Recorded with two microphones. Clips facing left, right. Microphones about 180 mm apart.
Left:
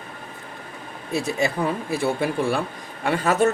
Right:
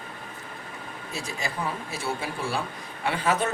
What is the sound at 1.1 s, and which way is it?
Speech, 65° left (ahead or behind).